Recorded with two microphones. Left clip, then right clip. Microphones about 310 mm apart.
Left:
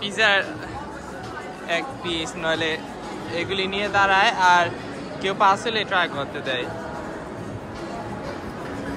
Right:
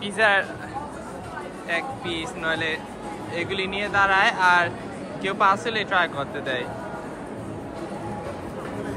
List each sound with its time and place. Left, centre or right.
0.0 s speech: centre
1.7 s speech: centre